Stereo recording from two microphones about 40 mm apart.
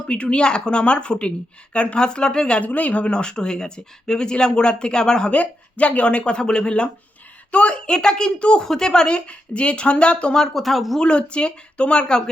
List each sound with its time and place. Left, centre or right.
0.1 s speech: left
2.0 s speech: centre
2.6 s speech: left
3.1 s speech: left
5.3 s speech: left
8.6 s speech: centre
9.0 s speech: left
10.3 s speech: centre
10.6 s speech: centre
11.0 s speech: left